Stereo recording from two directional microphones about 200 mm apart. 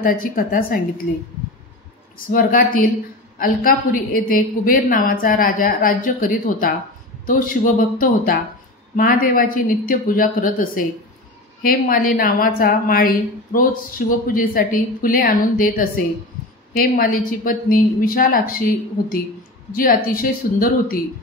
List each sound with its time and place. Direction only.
0.0 s a woman's voice: 45° left (ahead or behind)
2.3 s a woman's voice: 45° left (ahead or behind)
19.7 s a woman's voice: 45° left (ahead or behind)